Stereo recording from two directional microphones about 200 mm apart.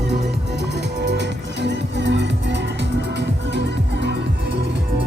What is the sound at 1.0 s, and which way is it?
Music, 60° right (ahead or behind).